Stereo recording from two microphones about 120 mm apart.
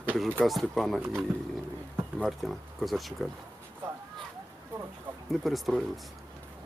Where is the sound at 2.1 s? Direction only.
Centre (ahead or behind).